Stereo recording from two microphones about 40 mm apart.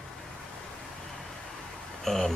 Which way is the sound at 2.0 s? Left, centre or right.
Centre.